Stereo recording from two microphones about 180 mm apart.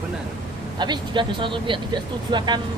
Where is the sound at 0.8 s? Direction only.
25° right (ahead or behind).